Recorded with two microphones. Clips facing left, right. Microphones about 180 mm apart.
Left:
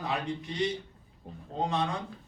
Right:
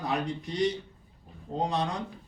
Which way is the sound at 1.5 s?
20° right (ahead or behind).